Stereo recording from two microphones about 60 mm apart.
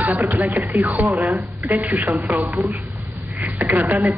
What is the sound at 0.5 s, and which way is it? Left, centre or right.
Speech, right.